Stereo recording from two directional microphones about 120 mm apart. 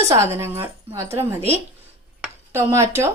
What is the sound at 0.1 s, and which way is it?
Speech, 25° right (ahead or behind).